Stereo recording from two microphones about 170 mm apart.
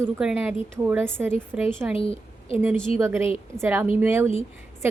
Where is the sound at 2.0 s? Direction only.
35° left (ahead or behind).